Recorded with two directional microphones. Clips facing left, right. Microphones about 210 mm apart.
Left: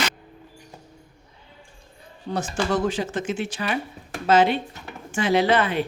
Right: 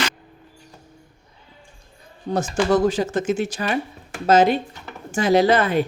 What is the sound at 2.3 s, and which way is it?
Speech, 40° right (ahead or behind).